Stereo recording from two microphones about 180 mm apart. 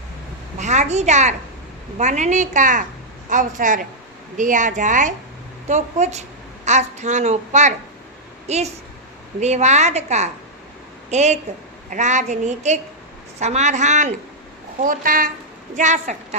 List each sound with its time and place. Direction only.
0.6 s a woman's voice: 40° right (ahead or behind)